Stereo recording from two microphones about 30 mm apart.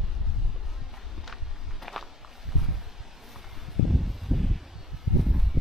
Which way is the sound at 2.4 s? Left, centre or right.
Centre.